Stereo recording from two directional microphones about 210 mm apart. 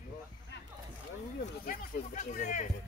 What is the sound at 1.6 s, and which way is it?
Music, 40° left (ahead or behind).